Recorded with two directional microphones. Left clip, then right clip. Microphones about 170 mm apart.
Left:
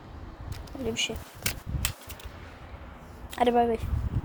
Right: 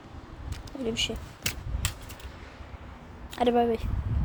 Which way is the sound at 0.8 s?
15° right (ahead or behind).